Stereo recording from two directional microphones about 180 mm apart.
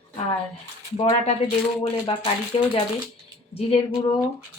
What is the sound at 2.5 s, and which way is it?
Speech, 30° left (ahead or behind).